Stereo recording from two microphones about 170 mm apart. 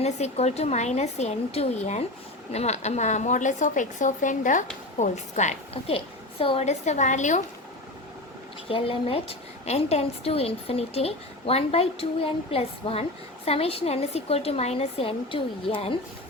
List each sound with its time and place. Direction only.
0.0 s a woman's voice: 40° left (ahead or behind)
8.7 s a woman's voice: 35° left (ahead or behind)